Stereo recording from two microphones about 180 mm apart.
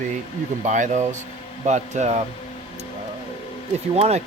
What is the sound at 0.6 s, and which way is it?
Speech, 45° right (ahead or behind).